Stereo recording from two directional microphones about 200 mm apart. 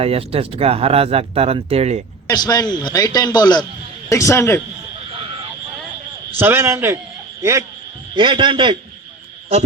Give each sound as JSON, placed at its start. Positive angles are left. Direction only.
{"t": 0.0, "sound": "speech", "side_deg": -30}
{"t": 2.2, "sound": "a man's voice", "side_deg": 20}
{"t": 6.4, "sound": "a man's voice", "side_deg": -10}
{"t": 8.1, "sound": "speech", "side_deg": -25}